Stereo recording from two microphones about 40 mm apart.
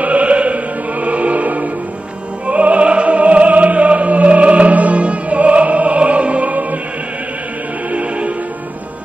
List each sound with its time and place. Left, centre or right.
0.0 s music: right
7.9 s music: right